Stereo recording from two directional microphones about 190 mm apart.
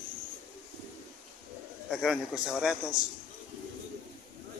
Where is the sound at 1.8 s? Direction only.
Centre (ahead or behind).